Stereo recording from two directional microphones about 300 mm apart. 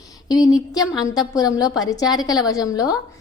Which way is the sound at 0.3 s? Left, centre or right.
Centre.